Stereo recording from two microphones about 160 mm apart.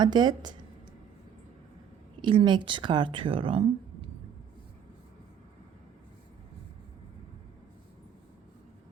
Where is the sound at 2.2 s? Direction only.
30° right (ahead or behind).